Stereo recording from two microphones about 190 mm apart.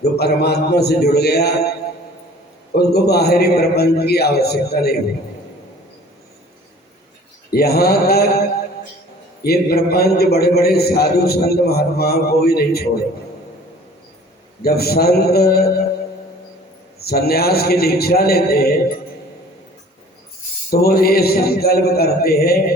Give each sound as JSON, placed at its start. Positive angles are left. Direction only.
{"t": 0.0, "sound": "a man's voice", "side_deg": 60}
{"t": 2.7, "sound": "a man's voice", "side_deg": 55}
{"t": 7.5, "sound": "a man's voice", "side_deg": 55}
{"t": 14.6, "sound": "a man's voice", "side_deg": 55}
{"t": 17.0, "sound": "a man's voice", "side_deg": 55}
{"t": 20.7, "sound": "mantra", "side_deg": 55}